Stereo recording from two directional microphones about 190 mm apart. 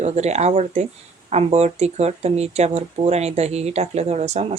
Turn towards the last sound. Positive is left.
turn(degrees=-35)  # may be behind; listen again after turning